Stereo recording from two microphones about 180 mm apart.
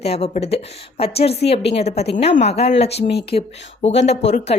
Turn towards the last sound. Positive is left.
turn(degrees=35)  # may be behind; listen again after turning